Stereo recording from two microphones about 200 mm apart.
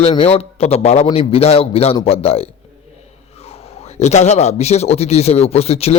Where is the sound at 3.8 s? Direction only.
35° left (ahead or behind).